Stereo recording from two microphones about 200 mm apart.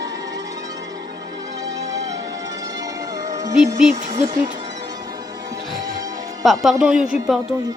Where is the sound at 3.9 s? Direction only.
40° right (ahead or behind).